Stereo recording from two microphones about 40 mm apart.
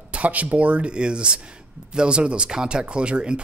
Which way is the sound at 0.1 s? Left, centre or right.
Right.